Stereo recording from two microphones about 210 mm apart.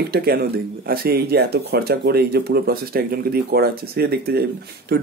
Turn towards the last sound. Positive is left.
turn(degrees=-50)  # may be behind; listen again after turning